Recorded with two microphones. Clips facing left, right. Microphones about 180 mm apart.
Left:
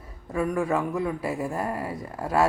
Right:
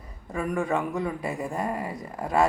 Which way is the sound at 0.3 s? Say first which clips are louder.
Left 2 dB; centre (ahead or behind).